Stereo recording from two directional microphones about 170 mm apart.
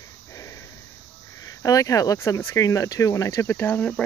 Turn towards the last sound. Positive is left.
turn(degrees=10)  # may be behind; listen again after turning